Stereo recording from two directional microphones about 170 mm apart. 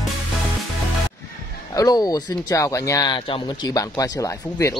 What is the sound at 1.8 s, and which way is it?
Speech, 25° left (ahead or behind).